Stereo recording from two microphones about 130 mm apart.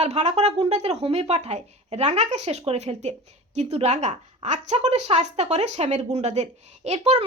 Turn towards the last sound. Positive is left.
turn(degrees=-60)  # may be behind; listen again after turning